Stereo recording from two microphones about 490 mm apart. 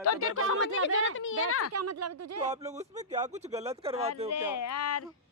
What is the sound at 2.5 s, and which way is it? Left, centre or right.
Speech, centre.